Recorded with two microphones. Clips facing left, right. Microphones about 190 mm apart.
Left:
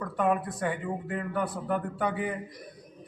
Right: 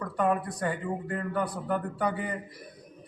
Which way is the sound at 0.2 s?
Centre (ahead or behind).